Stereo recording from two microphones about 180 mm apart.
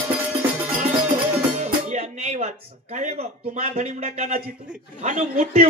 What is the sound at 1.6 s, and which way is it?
Music, 40° right (ahead or behind).